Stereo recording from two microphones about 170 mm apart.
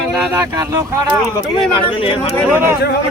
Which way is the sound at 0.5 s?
20° right (ahead or behind).